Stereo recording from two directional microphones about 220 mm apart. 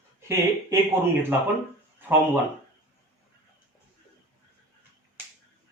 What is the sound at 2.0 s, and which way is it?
Speech, 10° right (ahead or behind).